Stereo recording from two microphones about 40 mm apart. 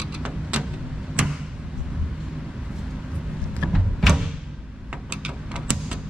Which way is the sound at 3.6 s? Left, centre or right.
Centre.